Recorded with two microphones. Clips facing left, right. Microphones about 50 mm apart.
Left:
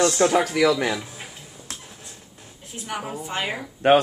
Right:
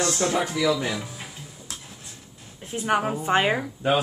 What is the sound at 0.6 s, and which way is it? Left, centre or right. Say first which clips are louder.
Speech: left 4 dB; left.